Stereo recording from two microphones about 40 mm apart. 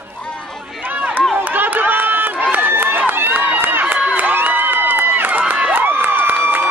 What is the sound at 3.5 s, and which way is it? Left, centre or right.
Run, right.